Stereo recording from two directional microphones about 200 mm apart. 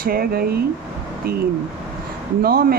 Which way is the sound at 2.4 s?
50° right (ahead or behind).